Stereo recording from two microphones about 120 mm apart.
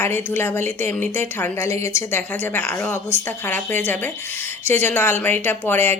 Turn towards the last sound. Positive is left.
turn(degrees=20)  # may be behind; listen again after turning